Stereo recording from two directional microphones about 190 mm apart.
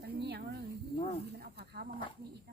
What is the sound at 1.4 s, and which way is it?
Snake, 55° right (ahead or behind).